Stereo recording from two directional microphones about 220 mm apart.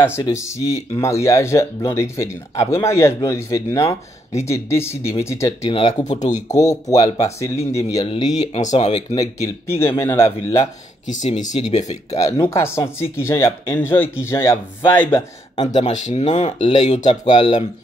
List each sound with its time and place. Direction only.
0.0 s speech: 10° left (ahead or behind)
6.0 s speech: 30° left (ahead or behind)
6.5 s speech: 15° left (ahead or behind)
8.5 s speech: 30° left (ahead or behind)
9.1 s speech: 15° left (ahead or behind)
11.1 s speech: 30° left (ahead or behind)
12.2 s speech: 15° left (ahead or behind)
15.8 s speech: 30° left (ahead or behind)